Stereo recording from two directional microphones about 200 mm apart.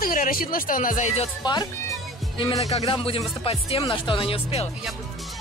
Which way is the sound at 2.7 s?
30° left (ahead or behind).